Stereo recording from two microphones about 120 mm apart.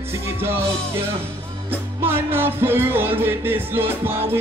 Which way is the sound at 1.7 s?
20° right (ahead or behind).